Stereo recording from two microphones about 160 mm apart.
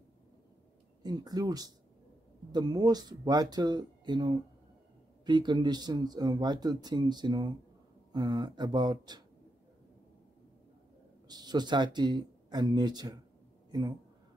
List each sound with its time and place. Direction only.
1.0 s speech: 25° right (ahead or behind)
11.2 s a man's voice: 25° right (ahead or behind)